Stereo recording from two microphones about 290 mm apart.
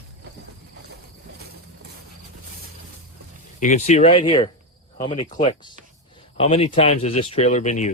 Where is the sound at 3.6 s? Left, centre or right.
Left.